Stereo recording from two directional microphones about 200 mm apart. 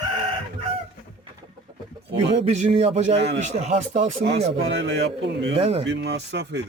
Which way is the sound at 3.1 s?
60° right (ahead or behind).